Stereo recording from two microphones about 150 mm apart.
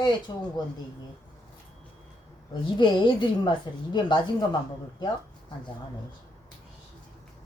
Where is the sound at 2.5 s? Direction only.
30° left (ahead or behind).